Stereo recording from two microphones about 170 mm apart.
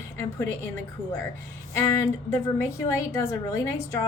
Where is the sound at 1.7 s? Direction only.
15° left (ahead or behind).